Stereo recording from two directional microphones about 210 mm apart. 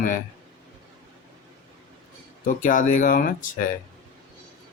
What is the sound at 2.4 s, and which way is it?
Speech, 40° left (ahead or behind).